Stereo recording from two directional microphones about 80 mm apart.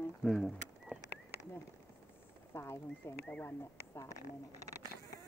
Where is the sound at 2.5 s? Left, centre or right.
Left.